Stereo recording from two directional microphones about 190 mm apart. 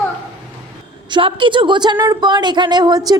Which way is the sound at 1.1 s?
25° right (ahead or behind).